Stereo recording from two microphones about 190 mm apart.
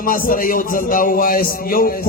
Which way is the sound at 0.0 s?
45° left (ahead or behind).